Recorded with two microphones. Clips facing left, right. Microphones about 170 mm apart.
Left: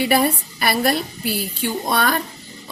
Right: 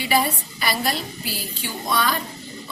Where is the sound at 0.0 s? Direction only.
55° left (ahead or behind).